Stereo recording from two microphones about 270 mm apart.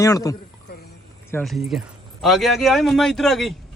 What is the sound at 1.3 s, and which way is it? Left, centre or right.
A man's voice, centre.